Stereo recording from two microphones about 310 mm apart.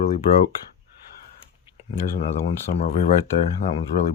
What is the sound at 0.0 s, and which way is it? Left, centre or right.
Speech, left.